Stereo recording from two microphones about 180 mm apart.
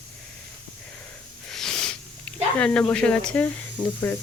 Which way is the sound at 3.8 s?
25° left (ahead or behind).